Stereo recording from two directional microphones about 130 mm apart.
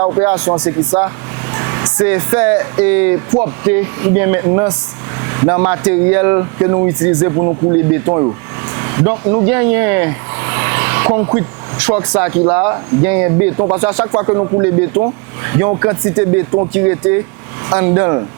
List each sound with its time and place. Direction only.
0.0 s speech: 20° right (ahead or behind)
7.0 s speech: 10° right (ahead or behind)
7.3 s speech: 25° right (ahead or behind)